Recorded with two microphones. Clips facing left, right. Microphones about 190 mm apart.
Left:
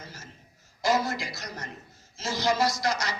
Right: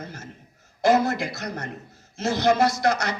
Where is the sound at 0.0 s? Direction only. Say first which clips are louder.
Right 8 dB; 60° right (ahead or behind).